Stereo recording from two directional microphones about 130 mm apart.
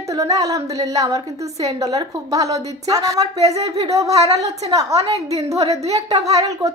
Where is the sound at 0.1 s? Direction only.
25° right (ahead or behind).